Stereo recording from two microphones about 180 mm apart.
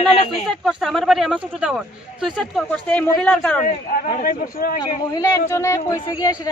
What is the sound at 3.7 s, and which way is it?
A man's voice, 45° left (ahead or behind).